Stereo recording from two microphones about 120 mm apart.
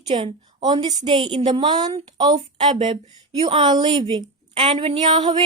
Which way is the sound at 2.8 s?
55° right (ahead or behind).